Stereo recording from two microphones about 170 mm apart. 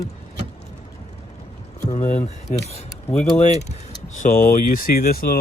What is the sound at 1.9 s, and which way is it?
Speech, 45° left (ahead or behind).